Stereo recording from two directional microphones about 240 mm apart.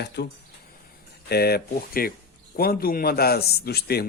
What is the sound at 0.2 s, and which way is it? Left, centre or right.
A man's voice, left.